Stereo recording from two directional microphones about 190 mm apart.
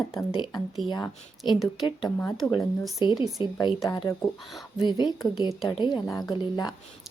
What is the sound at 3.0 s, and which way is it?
A woman's voice, 25° left (ahead or behind).